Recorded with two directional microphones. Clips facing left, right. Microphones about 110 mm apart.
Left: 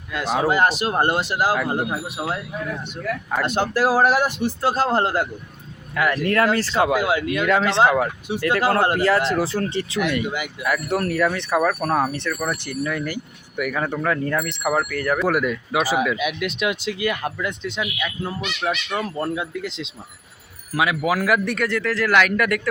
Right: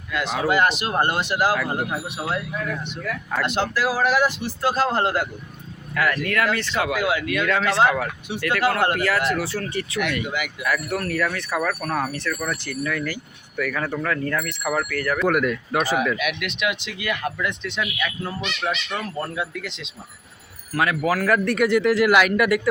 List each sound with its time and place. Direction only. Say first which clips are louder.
0.1 s a man's voice: left 1 dB; 30° left (ahead or behind)
3.8 s speech: left 3 dB; 40° left (ahead or behind)
5.9 s speech: left 1 dB; 20° left (ahead or behind)
6.2 s speech: left 4 dB; 35° left (ahead or behind)
15.2 s speech: even; 5° left (ahead or behind)
16.1 s speech: left 2 dB; 25° left (ahead or behind)
20.7 s a man's voice: left 1 dB; 10° left (ahead or behind)
21.6 s speech: right 5 dB; 15° right (ahead or behind)